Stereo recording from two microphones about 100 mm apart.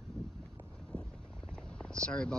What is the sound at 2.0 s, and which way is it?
Speech, 10° left (ahead or behind).